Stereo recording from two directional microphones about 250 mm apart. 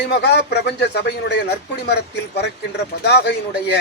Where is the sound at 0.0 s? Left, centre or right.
Left.